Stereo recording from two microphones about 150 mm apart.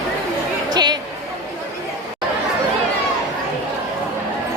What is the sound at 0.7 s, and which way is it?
Chatter, 30° right (ahead or behind).